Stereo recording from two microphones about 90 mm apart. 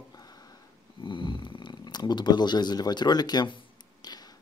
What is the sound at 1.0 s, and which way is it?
Speech, 65° left (ahead or behind).